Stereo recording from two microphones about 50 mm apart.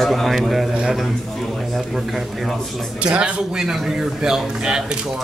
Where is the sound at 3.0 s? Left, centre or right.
Right.